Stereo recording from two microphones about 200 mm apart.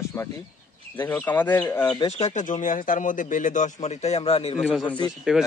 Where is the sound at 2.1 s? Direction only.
35° left (ahead or behind).